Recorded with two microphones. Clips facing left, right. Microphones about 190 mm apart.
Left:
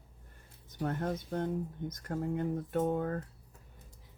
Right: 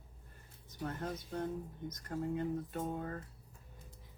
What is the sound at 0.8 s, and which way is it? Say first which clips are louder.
Speech: left 6 dB; 55° left (ahead or behind).